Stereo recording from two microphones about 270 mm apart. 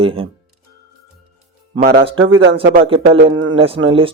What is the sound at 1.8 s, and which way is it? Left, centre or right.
Speech, right.